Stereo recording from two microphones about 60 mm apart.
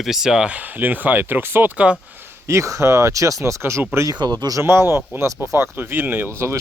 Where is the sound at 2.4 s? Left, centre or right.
Right.